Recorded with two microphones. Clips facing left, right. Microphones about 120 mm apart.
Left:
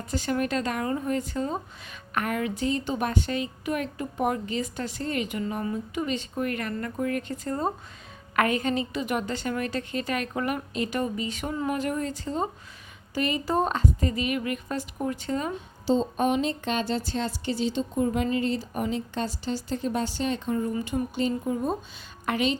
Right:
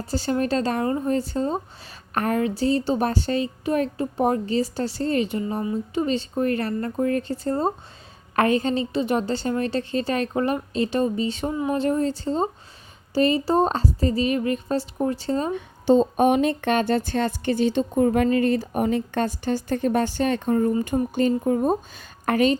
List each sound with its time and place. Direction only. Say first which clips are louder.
0.0 s speech: right 4 dB; 30° right (ahead or behind)
15.5 s a sound: right 9 dB; 55° right (ahead or behind)
18.3 s speech: right 6 dB; 55° right (ahead or behind)